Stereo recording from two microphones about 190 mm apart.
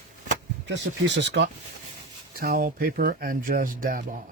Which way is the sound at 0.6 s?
75° right (ahead or behind).